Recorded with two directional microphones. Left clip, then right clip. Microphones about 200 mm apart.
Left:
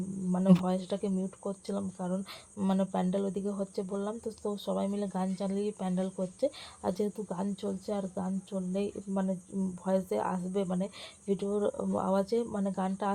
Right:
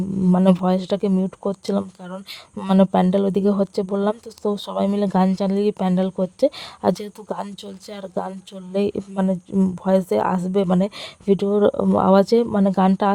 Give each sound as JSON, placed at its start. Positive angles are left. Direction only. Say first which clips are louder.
{"t": 0.6, "sound": "speech", "louder": "right 12 dB", "side_deg": -55}